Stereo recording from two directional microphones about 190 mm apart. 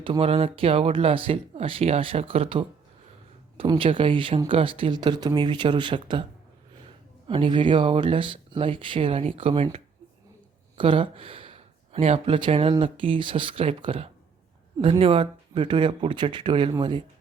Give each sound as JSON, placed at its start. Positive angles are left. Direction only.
{"t": 0.0, "sound": "speech", "side_deg": -30}
{"t": 7.3, "sound": "speech", "side_deg": -25}